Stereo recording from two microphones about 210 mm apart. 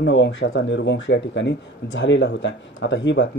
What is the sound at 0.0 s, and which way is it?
Speech, 60° left (ahead or behind).